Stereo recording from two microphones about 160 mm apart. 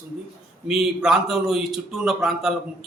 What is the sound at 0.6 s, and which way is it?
Speech, 5° right (ahead or behind).